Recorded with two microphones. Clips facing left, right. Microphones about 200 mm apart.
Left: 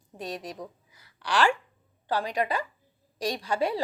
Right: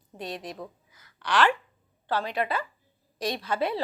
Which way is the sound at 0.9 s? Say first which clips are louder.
Even; 35° left (ahead or behind).